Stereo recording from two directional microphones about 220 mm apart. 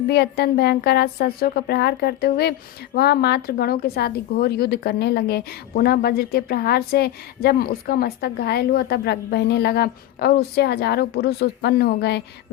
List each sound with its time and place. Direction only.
0.1 s a woman's voice: 45° left (ahead or behind)